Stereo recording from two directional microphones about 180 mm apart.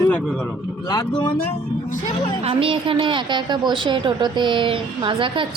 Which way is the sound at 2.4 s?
30° right (ahead or behind).